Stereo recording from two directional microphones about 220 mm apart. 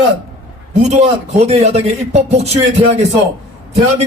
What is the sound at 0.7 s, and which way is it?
A man's voice, 30° right (ahead or behind).